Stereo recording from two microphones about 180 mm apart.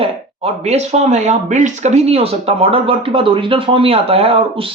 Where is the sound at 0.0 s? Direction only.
35° right (ahead or behind).